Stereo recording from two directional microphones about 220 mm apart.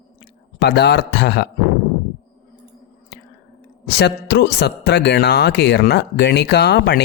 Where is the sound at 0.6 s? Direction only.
50° left (ahead or behind).